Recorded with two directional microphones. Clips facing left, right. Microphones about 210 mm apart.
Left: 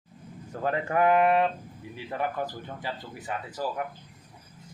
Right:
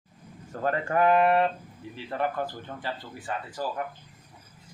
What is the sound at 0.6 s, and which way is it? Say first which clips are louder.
Speech: even; 10° left (ahead or behind).